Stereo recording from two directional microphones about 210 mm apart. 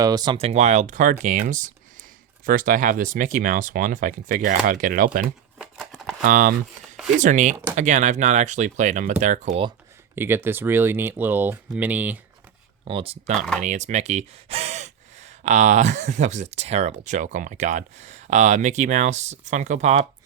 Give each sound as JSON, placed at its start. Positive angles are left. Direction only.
{"t": 0.0, "sound": "speech", "side_deg": -20}
{"t": 5.2, "sound": "shuffling cards", "side_deg": 0}
{"t": 6.2, "sound": "speech", "side_deg": -40}
{"t": 10.2, "sound": "speech", "side_deg": -10}
{"t": 12.8, "sound": "speech", "side_deg": -25}